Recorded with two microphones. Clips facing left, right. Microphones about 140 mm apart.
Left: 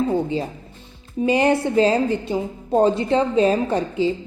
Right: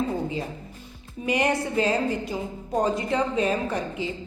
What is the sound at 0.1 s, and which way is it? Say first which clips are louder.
A woman's voice: left 6 dB; 30° left (ahead or behind).